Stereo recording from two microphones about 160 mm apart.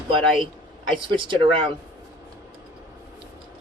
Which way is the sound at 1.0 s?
30° right (ahead or behind).